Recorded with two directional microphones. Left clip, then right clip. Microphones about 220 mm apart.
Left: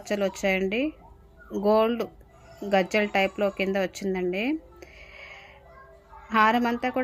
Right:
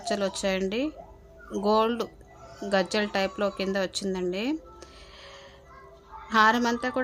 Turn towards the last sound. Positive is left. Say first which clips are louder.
# even
turn(degrees=0)  # may be behind; listen again after turning